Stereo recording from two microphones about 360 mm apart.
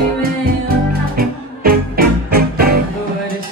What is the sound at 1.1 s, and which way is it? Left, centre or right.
Music, right.